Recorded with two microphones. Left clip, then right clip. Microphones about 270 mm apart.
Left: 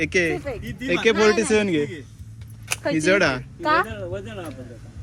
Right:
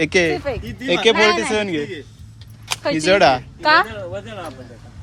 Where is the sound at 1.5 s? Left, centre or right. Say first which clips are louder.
Left 1 dB; centre.